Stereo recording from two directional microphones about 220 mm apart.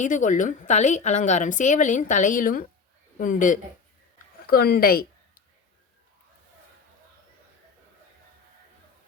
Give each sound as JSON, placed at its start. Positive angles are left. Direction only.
{"t": 0.0, "sound": "a woman's voice", "side_deg": 35}